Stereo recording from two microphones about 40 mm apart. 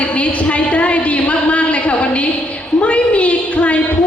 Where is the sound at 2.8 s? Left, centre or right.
Left.